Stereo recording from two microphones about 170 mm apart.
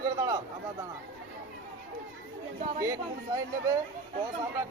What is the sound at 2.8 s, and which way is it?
Speech, 20° right (ahead or behind).